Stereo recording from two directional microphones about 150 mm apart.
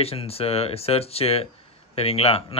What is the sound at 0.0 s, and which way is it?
Speech, 40° left (ahead or behind).